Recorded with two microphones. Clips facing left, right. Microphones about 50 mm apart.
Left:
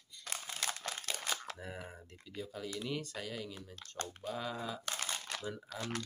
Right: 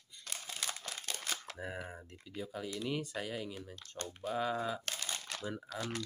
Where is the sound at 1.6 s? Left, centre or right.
Centre.